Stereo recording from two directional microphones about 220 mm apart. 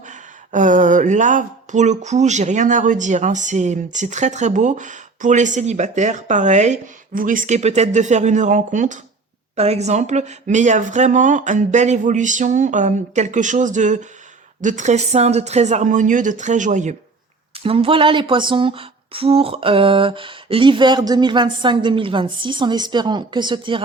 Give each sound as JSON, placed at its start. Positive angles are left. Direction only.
{"t": 0.0, "sound": "speech", "side_deg": -35}